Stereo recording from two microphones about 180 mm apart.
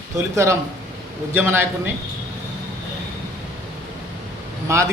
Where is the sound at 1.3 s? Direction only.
10° right (ahead or behind).